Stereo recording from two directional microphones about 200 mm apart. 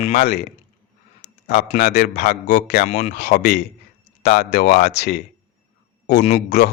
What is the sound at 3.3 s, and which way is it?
Speech, 55° left (ahead or behind).